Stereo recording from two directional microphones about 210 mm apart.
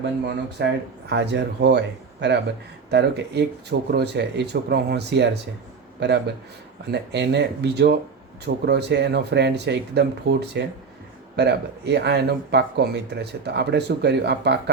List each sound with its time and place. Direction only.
0.0 s speech: 55° right (ahead or behind)